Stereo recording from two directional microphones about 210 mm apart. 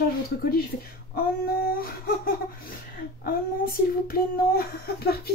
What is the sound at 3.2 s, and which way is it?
Child singing, 45° left (ahead or behind).